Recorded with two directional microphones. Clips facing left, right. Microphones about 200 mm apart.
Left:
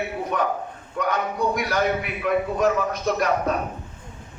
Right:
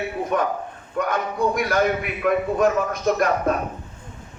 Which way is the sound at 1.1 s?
50° right (ahead or behind).